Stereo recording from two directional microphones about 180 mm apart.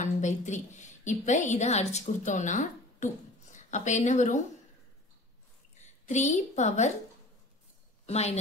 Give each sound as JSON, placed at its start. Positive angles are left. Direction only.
{"t": 0.0, "sound": "a woman's voice", "side_deg": 40}
{"t": 5.8, "sound": "a woman's voice", "side_deg": 40}
{"t": 8.1, "sound": "speech", "side_deg": 35}